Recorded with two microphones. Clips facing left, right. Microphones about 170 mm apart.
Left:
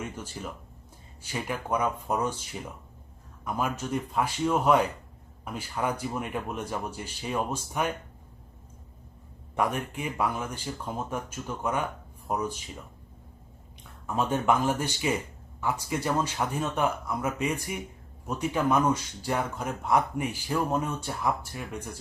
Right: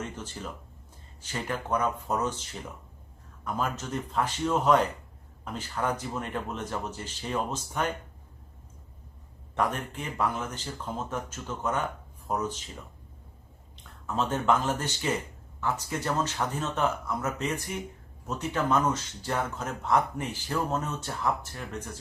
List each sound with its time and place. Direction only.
0.0 s a sound: 10° left (ahead or behind)
1.2 s speech: 10° left (ahead or behind)
9.6 s speech: 10° left (ahead or behind)
14.1 s speech: 10° left (ahead or behind)